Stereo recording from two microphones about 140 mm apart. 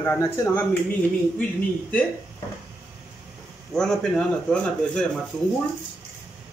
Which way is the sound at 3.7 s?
5° left (ahead or behind).